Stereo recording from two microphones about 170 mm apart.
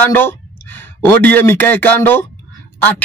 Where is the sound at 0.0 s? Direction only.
15° left (ahead or behind).